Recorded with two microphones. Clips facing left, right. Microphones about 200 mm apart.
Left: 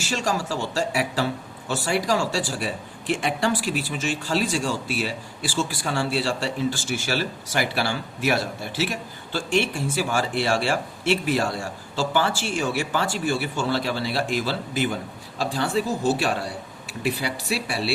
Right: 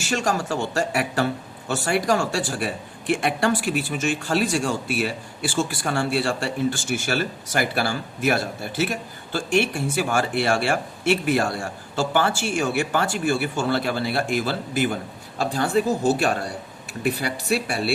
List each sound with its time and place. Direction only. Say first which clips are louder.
0.0 s speech: right 2 dB; 55° right (ahead or behind)